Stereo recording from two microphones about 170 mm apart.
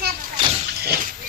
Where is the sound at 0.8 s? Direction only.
65° right (ahead or behind).